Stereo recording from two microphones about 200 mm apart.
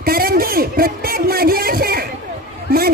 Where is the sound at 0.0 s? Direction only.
50° right (ahead or behind).